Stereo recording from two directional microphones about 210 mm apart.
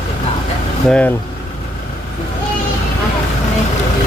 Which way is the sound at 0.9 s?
5° left (ahead or behind).